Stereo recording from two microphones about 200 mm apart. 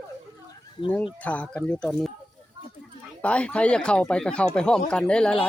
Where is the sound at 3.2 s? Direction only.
5° left (ahead or behind).